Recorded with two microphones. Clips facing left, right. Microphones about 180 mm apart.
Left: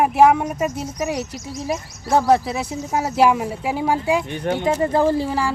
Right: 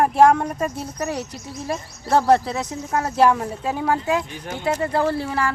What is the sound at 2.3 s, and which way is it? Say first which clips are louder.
Speech: even; 10° left (ahead or behind).